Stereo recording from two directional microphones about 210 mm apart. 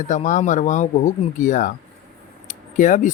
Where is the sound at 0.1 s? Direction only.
35° left (ahead or behind).